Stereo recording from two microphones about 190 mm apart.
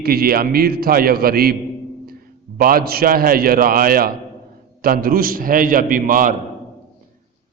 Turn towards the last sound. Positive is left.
turn(degrees=-45)  # may be behind; listen again after turning